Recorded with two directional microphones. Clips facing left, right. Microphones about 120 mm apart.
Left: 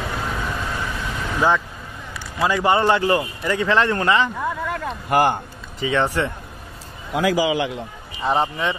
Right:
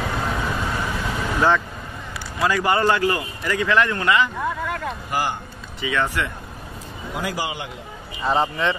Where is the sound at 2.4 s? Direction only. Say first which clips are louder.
Left 2 dB; 25° left (ahead or behind).